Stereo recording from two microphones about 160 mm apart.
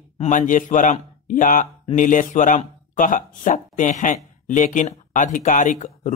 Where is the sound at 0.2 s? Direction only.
50° left (ahead or behind).